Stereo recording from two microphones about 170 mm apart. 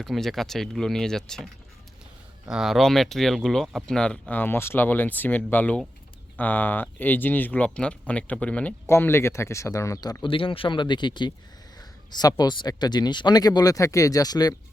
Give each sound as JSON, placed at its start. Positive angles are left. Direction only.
{"t": 0.0, "sound": "speech", "side_deg": 0}
{"t": 2.5, "sound": "speech", "side_deg": 0}